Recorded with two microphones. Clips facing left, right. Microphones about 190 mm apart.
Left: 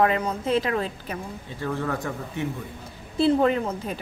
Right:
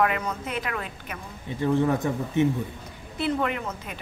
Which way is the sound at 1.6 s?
20° right (ahead or behind).